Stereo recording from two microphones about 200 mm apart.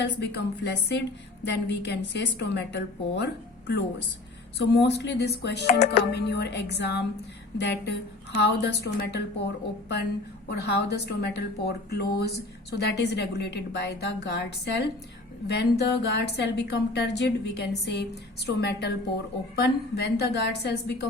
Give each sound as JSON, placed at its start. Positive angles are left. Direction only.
{"t": 0.0, "sound": "speech", "side_deg": 60}
{"t": 4.5, "sound": "speech", "side_deg": 60}
{"t": 10.5, "sound": "speech", "side_deg": 55}